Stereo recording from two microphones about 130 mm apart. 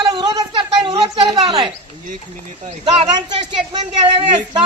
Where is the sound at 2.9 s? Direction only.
35° right (ahead or behind).